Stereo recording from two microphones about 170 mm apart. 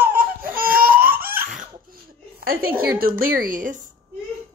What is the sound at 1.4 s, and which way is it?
Laughter, 50° right (ahead or behind).